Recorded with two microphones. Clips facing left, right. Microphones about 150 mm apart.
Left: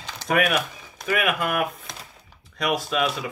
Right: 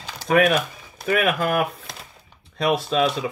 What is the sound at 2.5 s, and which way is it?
Speech, 30° right (ahead or behind).